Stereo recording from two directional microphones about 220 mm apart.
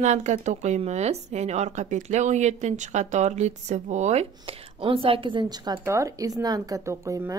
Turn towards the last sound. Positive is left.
turn(degrees=-15)  # may be behind; listen again after turning